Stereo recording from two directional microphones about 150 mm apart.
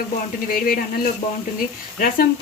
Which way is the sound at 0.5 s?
75° left (ahead or behind).